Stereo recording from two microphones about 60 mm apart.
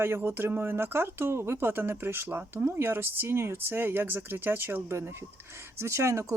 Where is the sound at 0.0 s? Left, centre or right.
Right.